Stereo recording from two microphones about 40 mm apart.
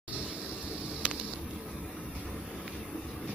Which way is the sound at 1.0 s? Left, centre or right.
Right.